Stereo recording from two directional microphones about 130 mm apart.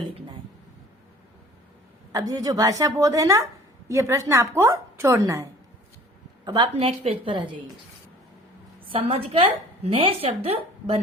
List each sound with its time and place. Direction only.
2.1 s a woman's voice: 30° right (ahead or behind)
6.7 s a woman's voice: 50° right (ahead or behind)
8.9 s a woman's voice: 50° right (ahead or behind)